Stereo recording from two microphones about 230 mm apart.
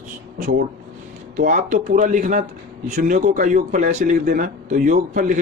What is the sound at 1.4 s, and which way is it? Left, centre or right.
Speech, right.